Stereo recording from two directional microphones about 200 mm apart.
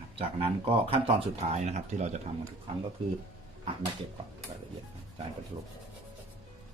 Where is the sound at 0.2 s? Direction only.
25° right (ahead or behind).